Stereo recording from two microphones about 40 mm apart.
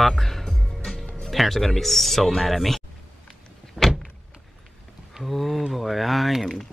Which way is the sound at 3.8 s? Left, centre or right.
Centre.